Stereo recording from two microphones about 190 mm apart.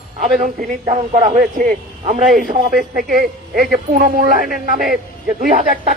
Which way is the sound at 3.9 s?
45° right (ahead or behind).